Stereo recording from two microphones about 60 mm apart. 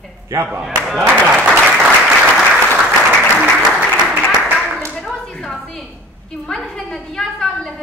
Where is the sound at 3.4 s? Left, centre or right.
Centre.